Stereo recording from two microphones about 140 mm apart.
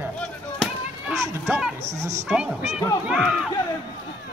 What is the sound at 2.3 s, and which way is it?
Speech, 5° right (ahead or behind).